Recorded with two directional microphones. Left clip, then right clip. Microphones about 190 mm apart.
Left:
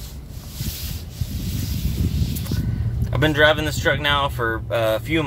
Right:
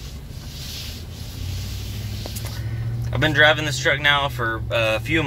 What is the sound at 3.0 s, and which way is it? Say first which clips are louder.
Speech: even; 25° left (ahead or behind).